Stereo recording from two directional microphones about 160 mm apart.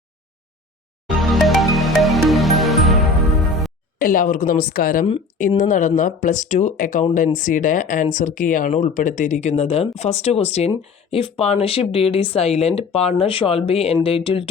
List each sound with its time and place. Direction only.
1.0 s music: centre (ahead or behind)
3.9 s a woman's voice: 60° left (ahead or behind); by 14.4 s 35° left (ahead or behind)